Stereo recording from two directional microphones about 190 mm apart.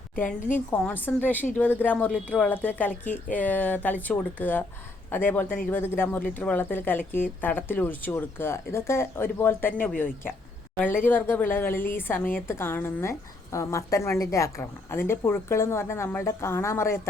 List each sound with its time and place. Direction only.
0.3 s a woman's voice: 40° left (ahead or behind)
0.7 s a woman's voice: 10° left (ahead or behind)
10.8 s a woman's voice: 10° left (ahead or behind)